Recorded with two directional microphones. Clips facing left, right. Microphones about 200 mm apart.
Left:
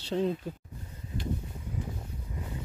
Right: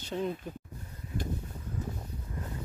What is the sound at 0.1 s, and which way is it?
Speech, 40° left (ahead or behind).